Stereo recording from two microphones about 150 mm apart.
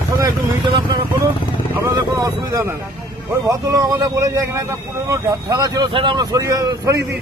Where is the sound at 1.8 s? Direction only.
20° right (ahead or behind).